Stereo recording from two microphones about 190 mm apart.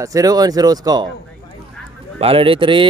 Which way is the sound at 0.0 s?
20° right (ahead or behind).